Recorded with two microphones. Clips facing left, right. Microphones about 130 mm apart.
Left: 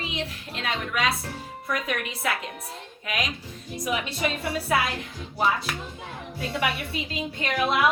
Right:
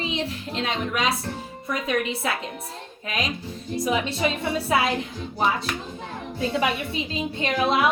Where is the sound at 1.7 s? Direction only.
25° right (ahead or behind).